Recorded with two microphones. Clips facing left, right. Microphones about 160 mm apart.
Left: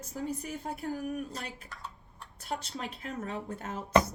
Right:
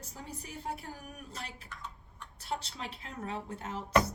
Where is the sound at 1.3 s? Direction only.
40° left (ahead or behind).